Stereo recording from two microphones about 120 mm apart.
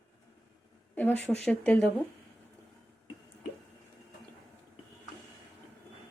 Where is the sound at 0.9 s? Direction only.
15° left (ahead or behind).